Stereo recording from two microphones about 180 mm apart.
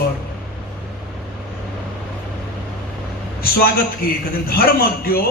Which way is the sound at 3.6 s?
55° left (ahead or behind).